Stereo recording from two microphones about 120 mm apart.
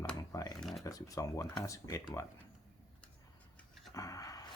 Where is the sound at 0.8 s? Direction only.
30° left (ahead or behind).